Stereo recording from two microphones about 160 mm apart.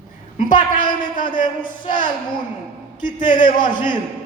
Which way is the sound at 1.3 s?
30° left (ahead or behind).